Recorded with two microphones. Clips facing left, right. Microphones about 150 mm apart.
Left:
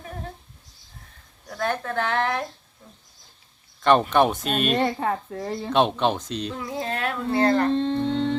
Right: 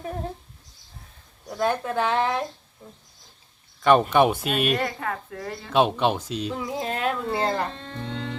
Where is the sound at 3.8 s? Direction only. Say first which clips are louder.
Right 1 dB; 5° right (ahead or behind).